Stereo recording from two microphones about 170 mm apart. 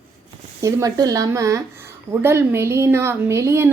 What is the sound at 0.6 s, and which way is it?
A woman's voice, 20° right (ahead or behind).